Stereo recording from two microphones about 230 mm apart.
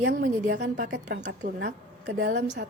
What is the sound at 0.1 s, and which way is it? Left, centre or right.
Speech, right.